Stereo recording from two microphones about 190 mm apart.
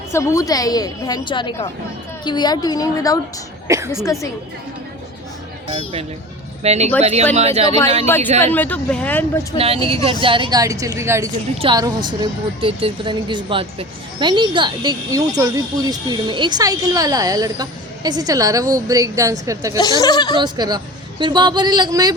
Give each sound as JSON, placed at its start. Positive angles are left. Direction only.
{"t": 0.1, "sound": "a woman's voice", "side_deg": 15}
{"t": 5.6, "sound": "speech", "side_deg": -30}
{"t": 8.0, "sound": "speech", "side_deg": 10}
{"t": 9.6, "sound": "a woman's voice", "side_deg": -30}
{"t": 20.0, "sound": "a woman's voice", "side_deg": 20}
{"t": 20.3, "sound": "a woman's voice", "side_deg": -20}